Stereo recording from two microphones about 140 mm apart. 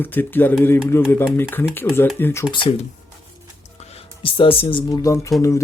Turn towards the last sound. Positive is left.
turn(degrees=20)  # may be behind; listen again after turning